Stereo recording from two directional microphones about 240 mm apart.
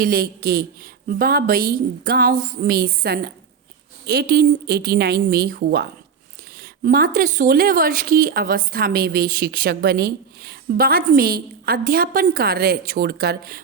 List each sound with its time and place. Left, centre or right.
0.0 s speech: right